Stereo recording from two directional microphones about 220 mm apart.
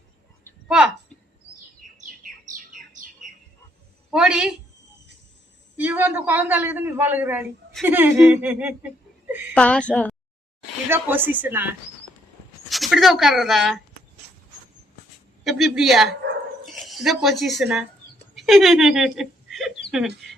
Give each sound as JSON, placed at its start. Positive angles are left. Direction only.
{"t": 1.8, "sound": "bird", "side_deg": -35}
{"t": 4.1, "sound": "a woman's voice", "side_deg": -5}
{"t": 5.7, "sound": "a man's voice", "side_deg": -10}
{"t": 9.6, "sound": "a woman's voice", "side_deg": 5}
{"t": 10.8, "sound": "speech", "side_deg": -10}
{"t": 15.4, "sound": "a woman's voice", "side_deg": 0}